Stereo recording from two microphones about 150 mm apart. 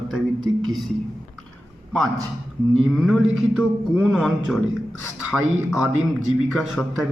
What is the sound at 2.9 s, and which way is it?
A man's voice, centre (ahead or behind).